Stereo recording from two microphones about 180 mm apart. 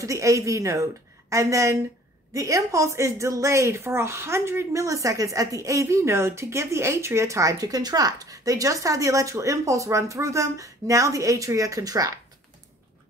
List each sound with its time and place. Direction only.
0.0 s a woman's voice: 15° right (ahead or behind)